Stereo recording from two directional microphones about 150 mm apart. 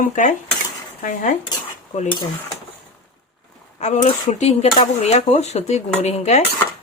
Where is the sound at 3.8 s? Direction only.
50° left (ahead or behind).